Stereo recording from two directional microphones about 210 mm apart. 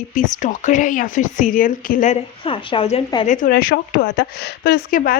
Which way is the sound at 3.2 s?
35° left (ahead or behind).